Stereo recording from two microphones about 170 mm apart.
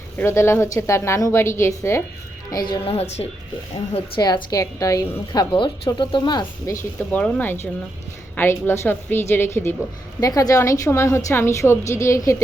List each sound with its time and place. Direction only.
0.2 s a woman's voice: 15° left (ahead or behind)
2.6 s a woman's voice: 35° left (ahead or behind)
7.1 s a woman's voice: 10° left (ahead or behind)